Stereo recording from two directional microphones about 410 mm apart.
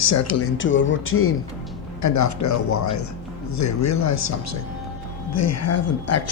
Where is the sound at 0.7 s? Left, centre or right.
Left.